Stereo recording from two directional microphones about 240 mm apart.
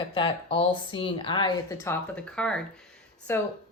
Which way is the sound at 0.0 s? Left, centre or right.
Centre.